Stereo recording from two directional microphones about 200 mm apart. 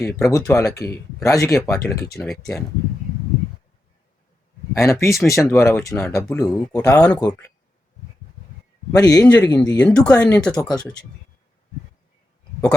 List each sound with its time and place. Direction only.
0.0 s speech: 15° left (ahead or behind)
1.8 s speech: centre (ahead or behind)
4.8 s speech: 15° left (ahead or behind)
7.2 s speech: 20° left (ahead or behind)
9.0 s speech: 20° left (ahead or behind)
9.2 s speech: 5° left (ahead or behind)
10.5 s speech: 20° left (ahead or behind)